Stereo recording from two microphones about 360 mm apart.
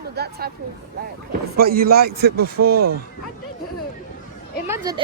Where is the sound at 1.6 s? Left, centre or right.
Right.